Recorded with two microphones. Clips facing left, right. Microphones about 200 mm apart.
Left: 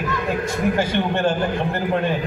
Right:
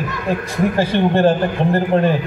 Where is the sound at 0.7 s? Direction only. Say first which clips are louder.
Right 5 dB; 35° right (ahead or behind).